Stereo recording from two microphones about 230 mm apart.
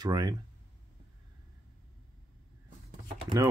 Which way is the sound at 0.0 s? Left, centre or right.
Centre.